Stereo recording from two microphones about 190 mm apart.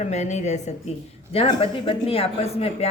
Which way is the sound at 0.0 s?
35° left (ahead or behind).